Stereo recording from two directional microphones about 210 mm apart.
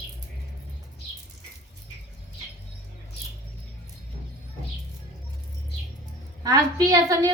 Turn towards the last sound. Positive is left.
turn(degrees=-15)  # may be behind; listen again after turning